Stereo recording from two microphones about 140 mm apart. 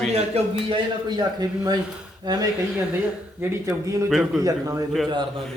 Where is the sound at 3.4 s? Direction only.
15° right (ahead or behind).